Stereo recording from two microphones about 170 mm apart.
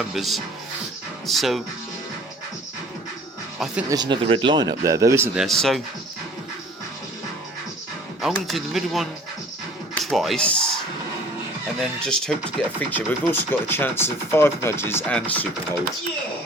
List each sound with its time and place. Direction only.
0.1 s speech: centre (ahead or behind)
3.8 s speech: 25° right (ahead or behind); by 5.8 s centre (ahead or behind)
8.2 s speech: centre (ahead or behind)
11.8 s speech: 5° left (ahead or behind)